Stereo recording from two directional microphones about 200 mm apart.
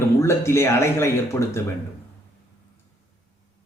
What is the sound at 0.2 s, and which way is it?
A man's voice, 15° left (ahead or behind).